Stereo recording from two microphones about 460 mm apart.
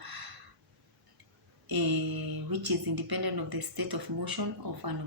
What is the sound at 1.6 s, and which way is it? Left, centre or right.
Speech, right.